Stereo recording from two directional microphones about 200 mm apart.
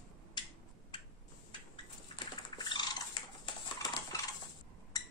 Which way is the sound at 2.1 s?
20° left (ahead or behind).